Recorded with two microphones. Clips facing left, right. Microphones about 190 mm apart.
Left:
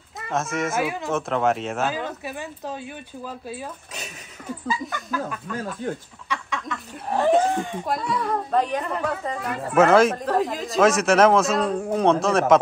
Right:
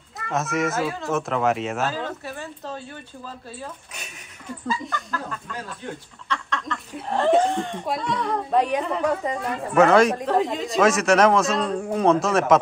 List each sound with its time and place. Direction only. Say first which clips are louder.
0.3 s speech: right 1 dB; centre (ahead or behind)
0.7 s speech: left 1 dB; 15° left (ahead or behind)
1.1 s speech: even; centre (ahead or behind)
1.9 s speech: left 1 dB; 15° left (ahead or behind)
4.8 s speech: left 2 dB; 5° left (ahead or behind)
8.5 s a woman's voice: right 4 dB; 10° right (ahead or behind)
9.4 s speech: even; centre (ahead or behind)